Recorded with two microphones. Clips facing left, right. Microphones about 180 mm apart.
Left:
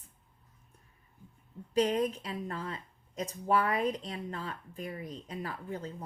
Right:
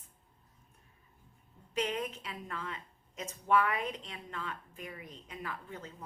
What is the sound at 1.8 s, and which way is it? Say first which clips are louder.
Speech: left 7 dB; 35° left (ahead or behind).